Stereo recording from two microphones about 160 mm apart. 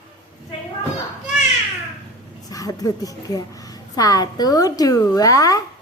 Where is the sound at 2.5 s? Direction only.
20° left (ahead or behind).